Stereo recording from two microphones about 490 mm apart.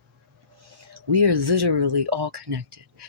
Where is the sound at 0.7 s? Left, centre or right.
Right.